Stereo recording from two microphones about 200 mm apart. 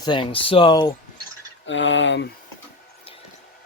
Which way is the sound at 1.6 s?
65° left (ahead or behind).